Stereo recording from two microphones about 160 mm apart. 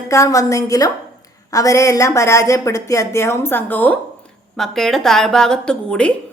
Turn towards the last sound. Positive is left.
turn(degrees=5)  # may be behind; listen again after turning